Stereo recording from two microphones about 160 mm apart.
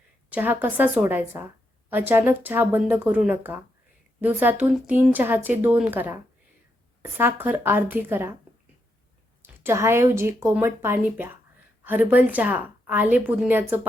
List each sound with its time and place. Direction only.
0.3 s speech: 10° right (ahead or behind)
9.4 s speech: 15° right (ahead or behind)